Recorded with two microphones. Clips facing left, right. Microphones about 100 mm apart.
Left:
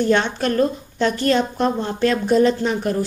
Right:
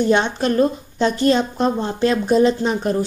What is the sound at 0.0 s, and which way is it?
A woman's voice, 20° right (ahead or behind).